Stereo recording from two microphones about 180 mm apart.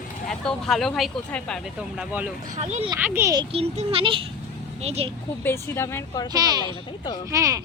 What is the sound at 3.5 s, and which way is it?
Speech, 35° right (ahead or behind).